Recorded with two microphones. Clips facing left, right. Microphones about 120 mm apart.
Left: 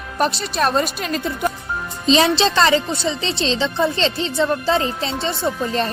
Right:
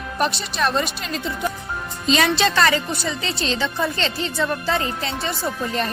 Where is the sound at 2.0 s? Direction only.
30° left (ahead or behind).